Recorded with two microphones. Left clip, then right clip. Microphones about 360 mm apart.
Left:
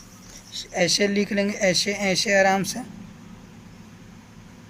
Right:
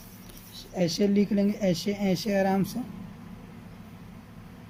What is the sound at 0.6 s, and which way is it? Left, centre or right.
Speech, left.